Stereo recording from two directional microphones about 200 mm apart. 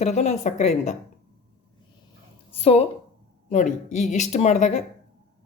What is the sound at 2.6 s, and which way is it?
A woman's voice, 30° left (ahead or behind).